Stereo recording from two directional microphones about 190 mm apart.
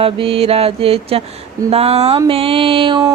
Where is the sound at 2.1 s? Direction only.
30° right (ahead or behind).